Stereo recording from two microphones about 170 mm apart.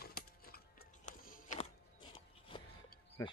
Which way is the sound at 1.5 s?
30° left (ahead or behind).